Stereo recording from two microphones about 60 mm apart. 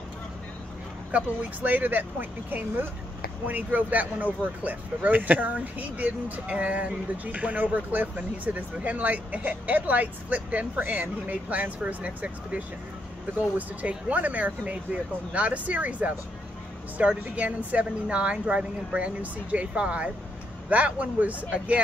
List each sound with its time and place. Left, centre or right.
1.1 s speech: right
17.2 s speech: right